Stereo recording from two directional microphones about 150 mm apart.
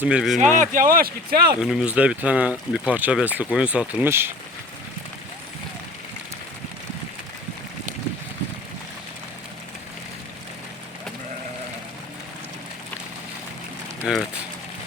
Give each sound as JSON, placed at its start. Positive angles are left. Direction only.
{"t": 0.0, "sound": "speech", "side_deg": -5}
{"t": 0.3, "sound": "speech", "side_deg": -55}
{"t": 1.5, "sound": "speech", "side_deg": -5}
{"t": 14.1, "sound": "speech", "side_deg": -5}